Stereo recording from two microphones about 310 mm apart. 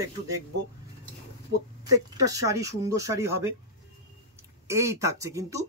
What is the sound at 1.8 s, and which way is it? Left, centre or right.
Speech, centre.